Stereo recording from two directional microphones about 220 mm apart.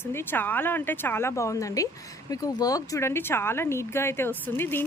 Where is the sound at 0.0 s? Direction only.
10° left (ahead or behind).